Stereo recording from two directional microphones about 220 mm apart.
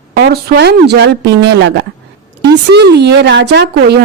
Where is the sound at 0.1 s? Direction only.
45° right (ahead or behind).